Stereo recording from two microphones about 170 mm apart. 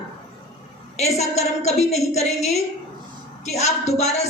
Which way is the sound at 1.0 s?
40° left (ahead or behind).